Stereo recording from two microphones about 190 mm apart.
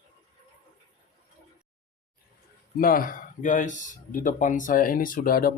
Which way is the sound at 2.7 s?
50° left (ahead or behind).